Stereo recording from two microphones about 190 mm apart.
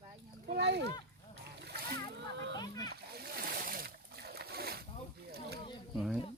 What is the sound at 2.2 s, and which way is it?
Speech, 65° right (ahead or behind).